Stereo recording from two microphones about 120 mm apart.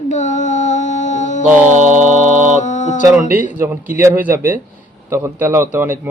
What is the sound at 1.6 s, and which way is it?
Mantra, 85° right.